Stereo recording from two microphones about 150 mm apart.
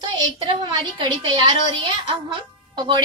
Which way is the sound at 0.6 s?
30° right (ahead or behind).